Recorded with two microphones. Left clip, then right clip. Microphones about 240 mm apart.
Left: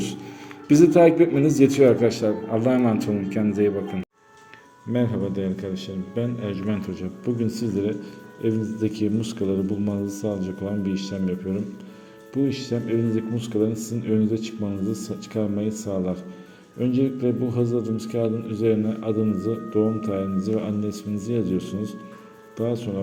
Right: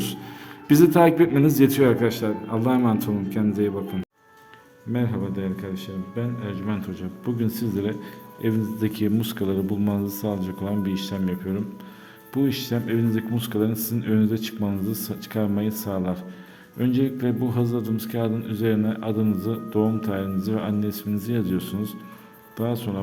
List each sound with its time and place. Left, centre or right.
0.7 s a man's voice: centre
4.9 s a man's voice: centre